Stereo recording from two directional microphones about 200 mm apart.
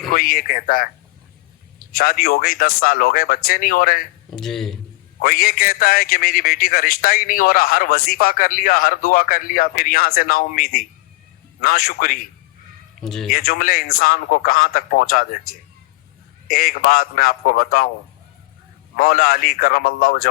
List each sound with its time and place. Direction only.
0.1 s a man's voice: 45° left (ahead or behind)
1.9 s a man's voice: 45° left (ahead or behind)
4.3 s a man's voice: centre (ahead or behind)
5.2 s a man's voice: 45° left (ahead or behind)
13.0 s a man's voice: centre (ahead or behind)
13.3 s a man's voice: 45° left (ahead or behind)
16.5 s a man's voice: 45° left (ahead or behind)
18.9 s a man's voice: 45° left (ahead or behind)